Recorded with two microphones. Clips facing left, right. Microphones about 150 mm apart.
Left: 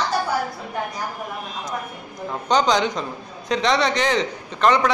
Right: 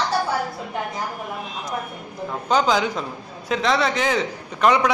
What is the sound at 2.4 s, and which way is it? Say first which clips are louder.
A man's voice: left 1 dB; 5° right (ahead or behind).